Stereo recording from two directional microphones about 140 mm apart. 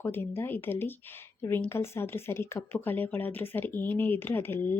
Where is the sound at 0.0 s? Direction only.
15° left (ahead or behind).